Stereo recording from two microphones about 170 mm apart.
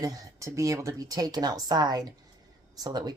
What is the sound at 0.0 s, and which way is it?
Speech, 20° right (ahead or behind).